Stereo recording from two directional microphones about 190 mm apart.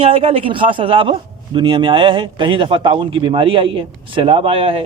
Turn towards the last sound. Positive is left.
turn(degrees=-30)  # may be behind; listen again after turning